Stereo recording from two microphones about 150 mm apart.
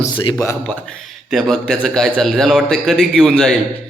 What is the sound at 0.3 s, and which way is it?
A man's voice, 15° left (ahead or behind).